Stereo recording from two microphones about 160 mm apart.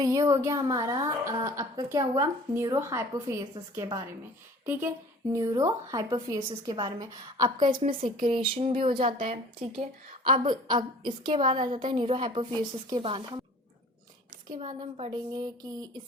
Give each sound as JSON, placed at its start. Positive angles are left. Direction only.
{"t": 0.0, "sound": "a woman's voice", "side_deg": -20}
{"t": 4.6, "sound": "a woman's voice", "side_deg": -15}
{"t": 10.4, "sound": "a woman's voice", "side_deg": -25}
{"t": 14.6, "sound": "a woman's voice", "side_deg": -35}